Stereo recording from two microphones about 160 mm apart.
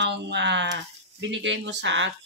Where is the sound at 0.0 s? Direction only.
90° right.